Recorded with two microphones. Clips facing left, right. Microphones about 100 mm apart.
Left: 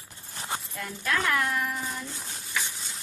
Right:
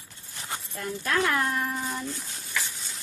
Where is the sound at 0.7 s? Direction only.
35° right (ahead or behind).